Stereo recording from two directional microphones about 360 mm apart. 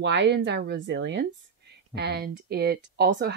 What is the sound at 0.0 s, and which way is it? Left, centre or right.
Speech, right.